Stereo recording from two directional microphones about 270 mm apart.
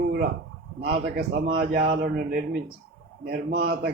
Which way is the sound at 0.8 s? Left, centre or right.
Right.